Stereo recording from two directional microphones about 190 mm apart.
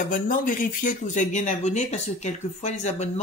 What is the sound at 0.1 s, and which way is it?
Speech, 45° left (ahead or behind).